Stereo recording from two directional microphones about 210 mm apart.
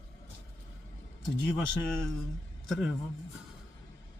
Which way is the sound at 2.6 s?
Centre (ahead or behind).